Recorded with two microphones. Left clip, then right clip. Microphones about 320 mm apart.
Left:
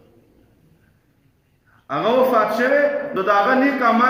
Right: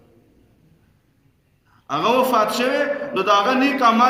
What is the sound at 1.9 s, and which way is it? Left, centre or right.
A man's voice, centre.